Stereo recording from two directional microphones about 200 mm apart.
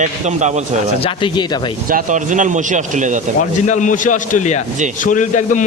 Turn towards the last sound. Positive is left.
turn(degrees=40)  # may be behind; listen again after turning